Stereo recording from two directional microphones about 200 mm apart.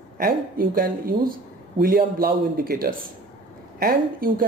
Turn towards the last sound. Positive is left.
turn(degrees=-45)  # may be behind; listen again after turning